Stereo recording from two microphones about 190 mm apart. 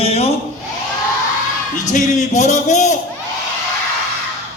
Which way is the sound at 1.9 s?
40° left (ahead or behind).